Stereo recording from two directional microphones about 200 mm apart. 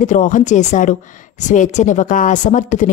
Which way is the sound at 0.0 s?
40° left (ahead or behind).